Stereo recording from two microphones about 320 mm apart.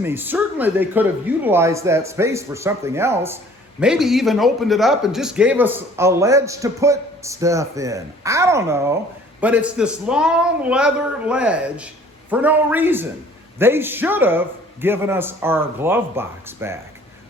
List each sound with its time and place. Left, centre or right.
0.0 s a man's voice: centre